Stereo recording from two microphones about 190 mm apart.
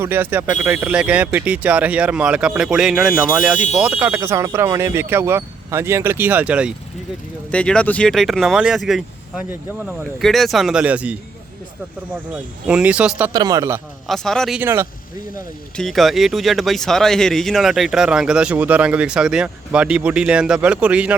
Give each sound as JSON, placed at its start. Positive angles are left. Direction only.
{"t": 0.0, "sound": "speech", "side_deg": -10}
{"t": 7.5, "sound": "speech", "side_deg": 5}
{"t": 12.3, "sound": "speech", "side_deg": -5}
{"t": 13.3, "sound": "speech", "side_deg": -20}
{"t": 14.1, "sound": "speech", "side_deg": 0}
{"t": 14.6, "sound": "speech", "side_deg": -15}
{"t": 15.7, "sound": "speech", "side_deg": 0}